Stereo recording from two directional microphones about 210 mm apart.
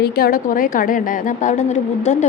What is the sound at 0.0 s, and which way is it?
A woman's voice, 45° left (ahead or behind).